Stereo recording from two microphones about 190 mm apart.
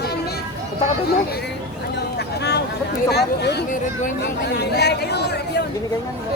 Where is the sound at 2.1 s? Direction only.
60° left (ahead or behind).